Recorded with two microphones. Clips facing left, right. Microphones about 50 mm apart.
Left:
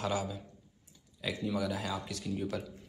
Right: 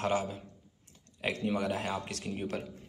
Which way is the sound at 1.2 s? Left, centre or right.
Right.